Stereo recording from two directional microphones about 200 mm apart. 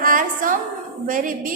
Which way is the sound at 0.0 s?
40° right (ahead or behind).